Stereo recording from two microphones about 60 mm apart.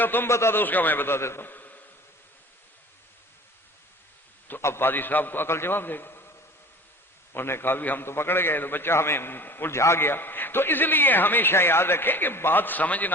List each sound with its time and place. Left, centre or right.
0.0 s a man's voice: left
0.3 s a man's voice: left
0.6 s a man's voice: left
1.5 s a sound: left
4.6 s a man's voice: left
7.3 s a man's voice: left
9.7 s a man's voice: left